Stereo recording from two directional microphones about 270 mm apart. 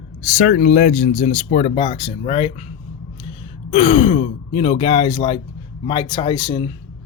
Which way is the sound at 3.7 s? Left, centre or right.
Centre.